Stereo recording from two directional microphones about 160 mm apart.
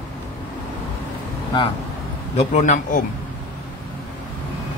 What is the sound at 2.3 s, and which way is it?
Speech, 50° left (ahead or behind).